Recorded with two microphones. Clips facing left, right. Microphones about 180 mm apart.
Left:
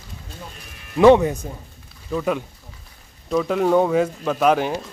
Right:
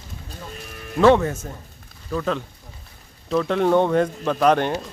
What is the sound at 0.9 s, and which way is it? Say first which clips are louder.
Speech: left 3 dB; 15° left (ahead or behind).